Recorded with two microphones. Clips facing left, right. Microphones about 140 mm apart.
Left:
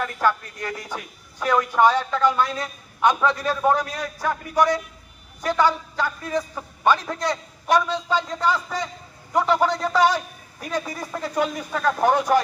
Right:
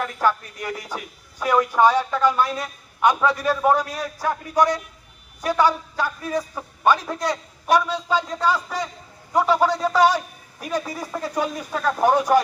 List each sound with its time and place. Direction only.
0.0 s speech: 15° right (ahead or behind)